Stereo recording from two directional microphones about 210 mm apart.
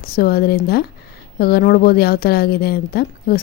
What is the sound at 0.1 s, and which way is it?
A woman's voice, 45° left (ahead or behind).